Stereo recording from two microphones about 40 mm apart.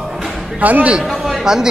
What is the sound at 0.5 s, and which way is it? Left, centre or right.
Speech, right.